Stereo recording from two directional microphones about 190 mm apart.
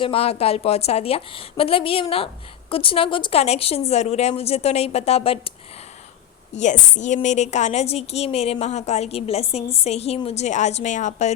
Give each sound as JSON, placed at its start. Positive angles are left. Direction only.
{"t": 0.0, "sound": "a woman's voice", "side_deg": 30}
{"t": 6.6, "sound": "a woman's voice", "side_deg": 40}